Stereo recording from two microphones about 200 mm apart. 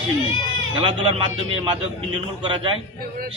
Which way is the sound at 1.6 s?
25° right (ahead or behind).